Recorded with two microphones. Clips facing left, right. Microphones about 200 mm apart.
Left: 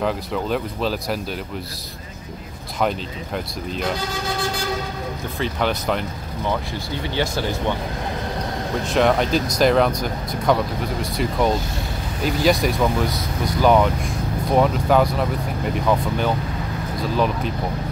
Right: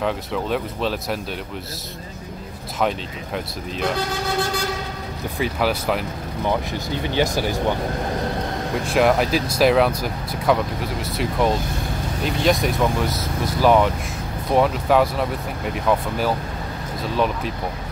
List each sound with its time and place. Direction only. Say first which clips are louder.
0.0 s speech: left 1 dB; centre (ahead or behind)
5.4 s speech: right 1 dB; 5° right (ahead or behind)
7.0 s speech: right 2 dB; 15° right (ahead or behind)
8.8 s speech: even; 5° right (ahead or behind)